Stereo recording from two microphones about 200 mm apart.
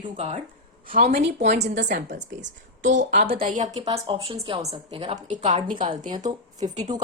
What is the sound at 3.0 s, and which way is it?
Speech, 55° right (ahead or behind).